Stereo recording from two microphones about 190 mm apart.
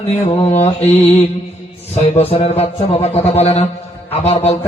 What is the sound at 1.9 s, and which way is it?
A man's voice, 35° left (ahead or behind).